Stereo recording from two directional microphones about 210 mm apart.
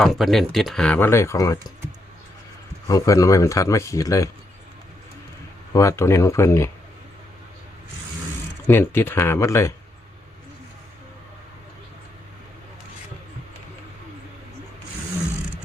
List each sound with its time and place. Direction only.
0.0 s speech: centre (ahead or behind)
2.8 s speech: 15° left (ahead or behind)
5.7 s speech: 15° left (ahead or behind)
8.6 s speech: 10° left (ahead or behind)